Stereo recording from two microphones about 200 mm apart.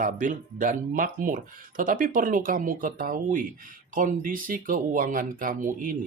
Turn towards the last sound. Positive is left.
turn(degrees=-40)  # may be behind; listen again after turning